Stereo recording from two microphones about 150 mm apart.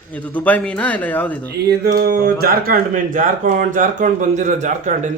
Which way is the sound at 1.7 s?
80° right.